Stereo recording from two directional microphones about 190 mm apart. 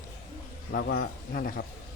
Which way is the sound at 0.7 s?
50° left (ahead or behind).